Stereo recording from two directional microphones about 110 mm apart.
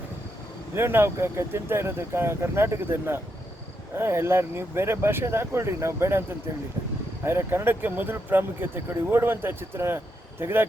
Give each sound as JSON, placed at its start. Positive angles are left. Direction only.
{"t": 0.8, "sound": "speech", "side_deg": -20}
{"t": 7.3, "sound": "speech", "side_deg": -20}